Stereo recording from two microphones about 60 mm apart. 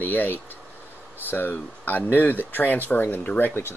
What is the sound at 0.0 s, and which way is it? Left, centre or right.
Speech, left.